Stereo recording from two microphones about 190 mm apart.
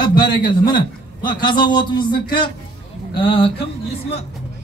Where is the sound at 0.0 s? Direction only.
25° left (ahead or behind).